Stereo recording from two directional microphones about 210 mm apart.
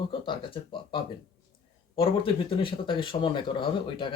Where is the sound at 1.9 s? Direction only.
25° left (ahead or behind).